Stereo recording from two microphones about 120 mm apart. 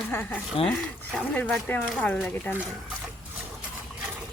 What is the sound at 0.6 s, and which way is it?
Speech, 50° left (ahead or behind).